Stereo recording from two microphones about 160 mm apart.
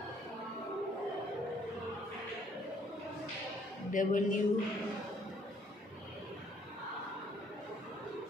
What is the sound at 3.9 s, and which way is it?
Speech, 55° left (ahead or behind).